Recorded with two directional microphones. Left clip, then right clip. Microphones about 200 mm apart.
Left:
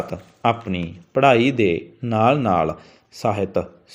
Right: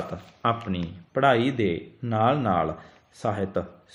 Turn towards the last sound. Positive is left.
turn(degrees=35)  # may be behind; listen again after turning